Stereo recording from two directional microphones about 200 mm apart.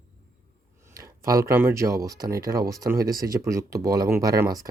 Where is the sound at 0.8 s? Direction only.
15° right (ahead or behind).